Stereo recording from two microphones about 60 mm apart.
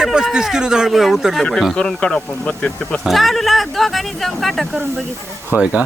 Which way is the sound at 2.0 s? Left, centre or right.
Centre.